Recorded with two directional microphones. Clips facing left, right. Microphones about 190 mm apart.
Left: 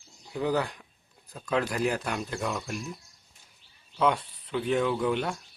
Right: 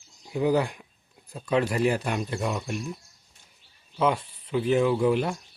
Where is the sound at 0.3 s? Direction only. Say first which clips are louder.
Right 4 dB; 10° right (ahead or behind).